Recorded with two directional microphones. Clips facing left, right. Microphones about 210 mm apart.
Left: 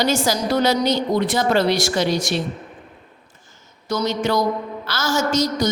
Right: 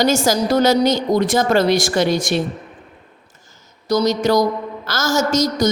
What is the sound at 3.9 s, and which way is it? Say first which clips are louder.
A woman's voice: right 5 dB; 40° right (ahead or behind).